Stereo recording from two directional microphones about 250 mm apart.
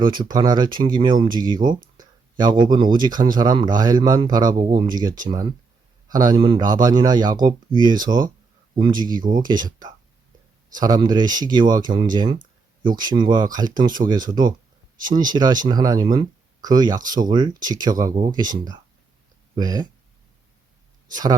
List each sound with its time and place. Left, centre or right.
0.0 s a man's voice: centre
2.0 s a sound: centre
2.9 s a man's voice: centre
10.8 s a man's voice: centre
21.1 s speech: centre